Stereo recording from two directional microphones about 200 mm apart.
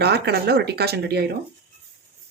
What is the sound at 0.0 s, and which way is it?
Speech, 55° right (ahead or behind).